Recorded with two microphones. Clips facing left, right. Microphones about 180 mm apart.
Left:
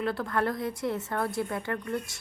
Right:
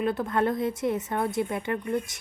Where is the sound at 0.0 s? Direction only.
20° right (ahead or behind).